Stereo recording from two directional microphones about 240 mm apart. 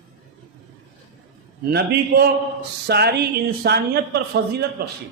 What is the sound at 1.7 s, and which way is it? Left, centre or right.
A man's voice, right.